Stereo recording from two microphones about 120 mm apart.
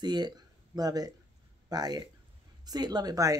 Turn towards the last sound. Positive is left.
turn(degrees=-30)  # may be behind; listen again after turning